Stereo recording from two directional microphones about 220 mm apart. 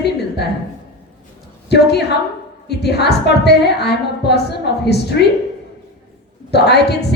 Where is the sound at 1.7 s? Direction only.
50° left (ahead or behind).